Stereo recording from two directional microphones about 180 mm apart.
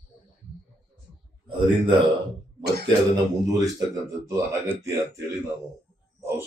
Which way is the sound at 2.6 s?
65° right (ahead or behind).